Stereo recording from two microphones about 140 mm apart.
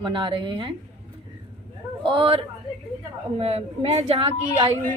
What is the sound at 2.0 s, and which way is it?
A woman's voice, 40° right (ahead or behind).